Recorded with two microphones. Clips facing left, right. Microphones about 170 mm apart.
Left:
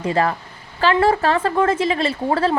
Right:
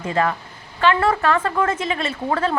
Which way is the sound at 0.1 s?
35° left (ahead or behind).